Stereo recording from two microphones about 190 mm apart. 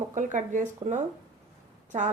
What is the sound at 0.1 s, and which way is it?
A woman's voice, 40° right (ahead or behind).